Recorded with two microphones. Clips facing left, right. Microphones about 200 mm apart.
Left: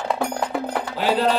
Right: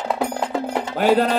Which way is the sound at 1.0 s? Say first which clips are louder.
Right 3 dB; 50° right (ahead or behind).